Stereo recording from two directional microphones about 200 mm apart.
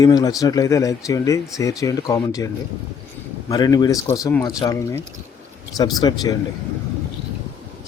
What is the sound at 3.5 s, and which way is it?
Speech, 20° left (ahead or behind).